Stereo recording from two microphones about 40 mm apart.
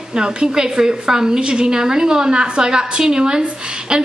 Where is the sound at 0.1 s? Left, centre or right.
Right.